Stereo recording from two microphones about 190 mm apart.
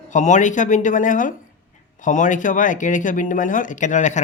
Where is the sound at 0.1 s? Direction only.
40° left (ahead or behind).